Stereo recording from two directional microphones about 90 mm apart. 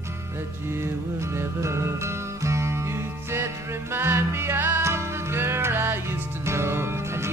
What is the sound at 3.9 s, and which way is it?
Music, 25° right (ahead or behind).